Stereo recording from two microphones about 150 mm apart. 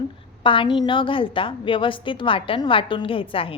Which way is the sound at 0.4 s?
35° left (ahead or behind).